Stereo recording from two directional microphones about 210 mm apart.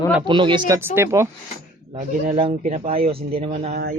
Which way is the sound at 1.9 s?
30° right (ahead or behind).